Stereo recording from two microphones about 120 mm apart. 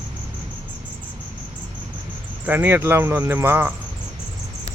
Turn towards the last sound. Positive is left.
turn(degrees=-20)  # may be behind; listen again after turning